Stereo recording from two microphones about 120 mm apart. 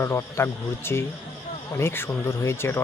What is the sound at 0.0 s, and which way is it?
Speech, 20° left (ahead or behind).